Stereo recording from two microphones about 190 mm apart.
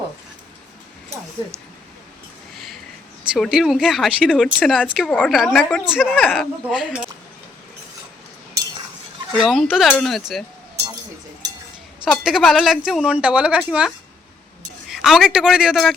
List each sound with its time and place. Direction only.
3.3 s speech: centre (ahead or behind)
9.3 s speech: centre (ahead or behind)
12.1 s speech: centre (ahead or behind)